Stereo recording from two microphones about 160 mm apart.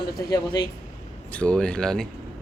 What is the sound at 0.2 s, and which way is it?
Speech, 20° left (ahead or behind).